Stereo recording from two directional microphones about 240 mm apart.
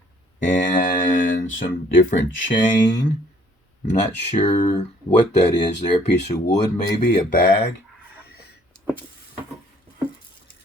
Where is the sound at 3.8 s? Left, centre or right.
Left.